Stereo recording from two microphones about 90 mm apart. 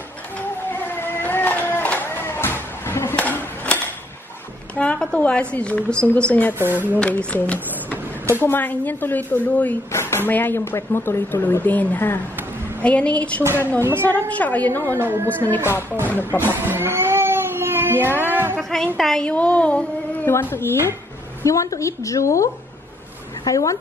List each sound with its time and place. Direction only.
0.7 s music: 25° left (ahead or behind)
3.2 s a sound: 15° left (ahead or behind)
4.7 s a woman's voice: 10° left (ahead or behind)
13.7 s a woman's voice: 25° right (ahead or behind)
14.0 s speech: 20° left (ahead or behind)
15.0 s a woman's voice: 25° right (ahead or behind)
15.5 s speech: 25° left (ahead or behind)
16.6 s cat: 25° right (ahead or behind)
18.2 s music: 25° right (ahead or behind)
18.6 s a woman's voice: 5° left (ahead or behind)
20.2 s speech: 30° left (ahead or behind)